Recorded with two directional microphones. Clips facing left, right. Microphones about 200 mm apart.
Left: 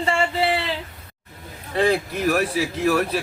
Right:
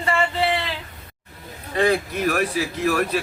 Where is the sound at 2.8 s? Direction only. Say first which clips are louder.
Left 1 dB; 5° left (ahead or behind).